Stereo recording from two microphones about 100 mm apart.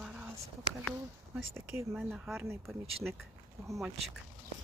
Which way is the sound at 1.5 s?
25° right (ahead or behind).